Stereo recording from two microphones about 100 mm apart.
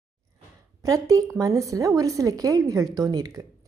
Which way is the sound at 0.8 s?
35° right (ahead or behind).